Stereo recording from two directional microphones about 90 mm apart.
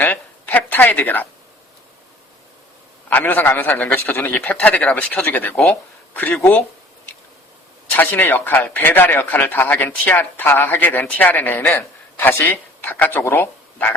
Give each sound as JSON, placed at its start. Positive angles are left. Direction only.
{"t": 0.0, "sound": "speech", "side_deg": 20}
{"t": 3.1, "sound": "speech", "side_deg": 20}
{"t": 7.9, "sound": "speech", "side_deg": 20}